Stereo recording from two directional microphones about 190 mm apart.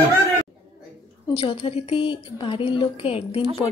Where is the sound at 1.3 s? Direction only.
30° left (ahead or behind).